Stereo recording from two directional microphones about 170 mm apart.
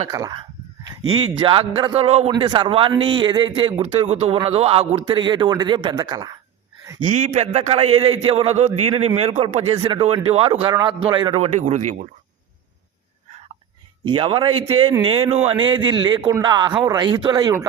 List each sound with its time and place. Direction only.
0.1 s a man's voice: 20° right (ahead or behind)
7.1 s a man's voice: 45° right (ahead or behind)
9.7 s a man's voice: 20° right (ahead or behind)
10.0 s a man's voice: 35° right (ahead or behind)
14.0 s a man's voice: 30° right (ahead or behind)